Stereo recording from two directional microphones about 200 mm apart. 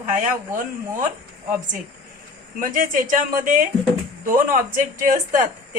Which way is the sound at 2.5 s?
40° right (ahead or behind).